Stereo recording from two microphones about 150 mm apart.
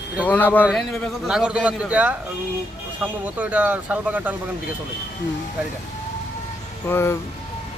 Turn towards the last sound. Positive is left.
turn(degrees=15)  # may be behind; listen again after turning